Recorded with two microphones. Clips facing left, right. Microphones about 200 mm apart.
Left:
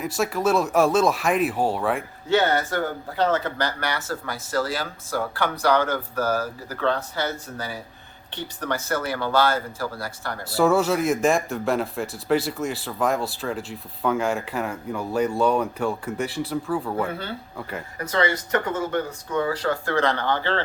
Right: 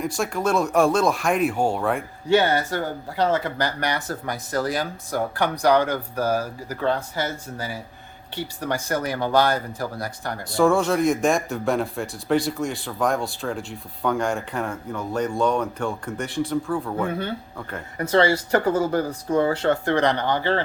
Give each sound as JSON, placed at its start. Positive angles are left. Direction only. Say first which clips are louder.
{"t": 0.0, "sound": "speech", "louder": "left 1 dB", "side_deg": 0}
{"t": 2.3, "sound": "speech", "louder": "right 1 dB", "side_deg": -15}
{"t": 10.5, "sound": "speech", "louder": "right 1 dB", "side_deg": 5}
{"t": 17.9, "sound": "speech", "louder": "right 5 dB", "side_deg": -30}